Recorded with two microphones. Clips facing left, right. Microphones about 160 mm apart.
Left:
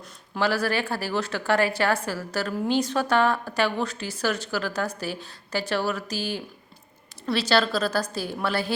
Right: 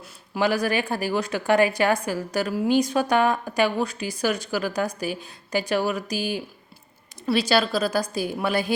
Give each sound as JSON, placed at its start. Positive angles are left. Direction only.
{"t": 0.0, "sound": "speech", "side_deg": -15}